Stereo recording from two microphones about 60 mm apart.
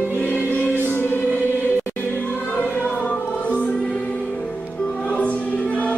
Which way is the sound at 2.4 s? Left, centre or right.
Left.